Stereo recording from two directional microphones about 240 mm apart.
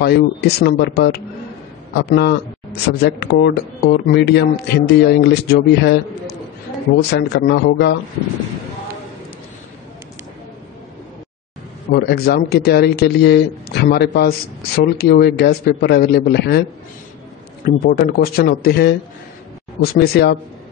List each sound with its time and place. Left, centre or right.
0.0 s speech: left
11.9 s speech: left
17.6 s speech: left